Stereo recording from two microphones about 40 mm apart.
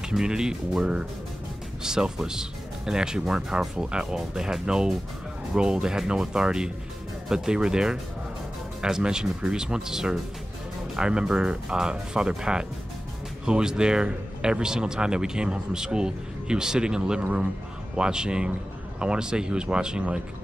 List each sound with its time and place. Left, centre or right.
0.1 s speech: centre
1.8 s speech: centre